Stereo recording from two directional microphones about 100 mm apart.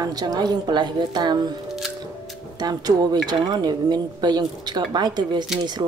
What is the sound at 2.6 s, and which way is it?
A woman's voice, 40° right (ahead or behind).